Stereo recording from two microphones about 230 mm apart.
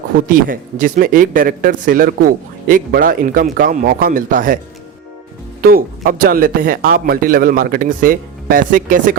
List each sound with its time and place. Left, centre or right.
0.3 s a man's voice: right
5.6 s a man's voice: right